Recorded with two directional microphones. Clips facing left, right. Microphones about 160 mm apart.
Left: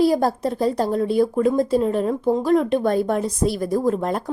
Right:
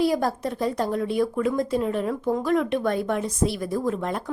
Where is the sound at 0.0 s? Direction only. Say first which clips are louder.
Left 5 dB; 35° left (ahead or behind).